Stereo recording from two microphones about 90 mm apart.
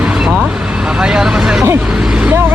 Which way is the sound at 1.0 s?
10° right (ahead or behind).